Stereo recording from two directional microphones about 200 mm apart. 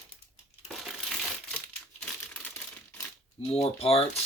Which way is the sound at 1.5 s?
5° left (ahead or behind).